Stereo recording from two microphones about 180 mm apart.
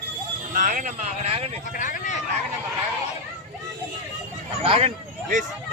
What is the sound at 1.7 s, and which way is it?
Speech, 45° left (ahead or behind).